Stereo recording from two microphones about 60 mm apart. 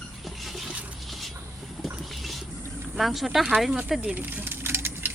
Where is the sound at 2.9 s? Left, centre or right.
Centre.